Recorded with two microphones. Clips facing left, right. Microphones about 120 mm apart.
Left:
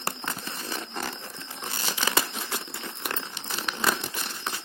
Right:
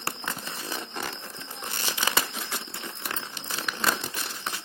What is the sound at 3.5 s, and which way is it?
Crumpling, centre (ahead or behind).